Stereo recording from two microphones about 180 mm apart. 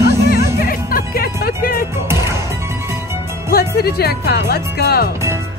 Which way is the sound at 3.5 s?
60° left (ahead or behind).